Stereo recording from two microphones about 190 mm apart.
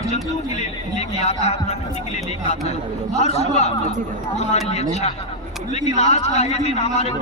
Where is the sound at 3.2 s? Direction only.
35° left (ahead or behind).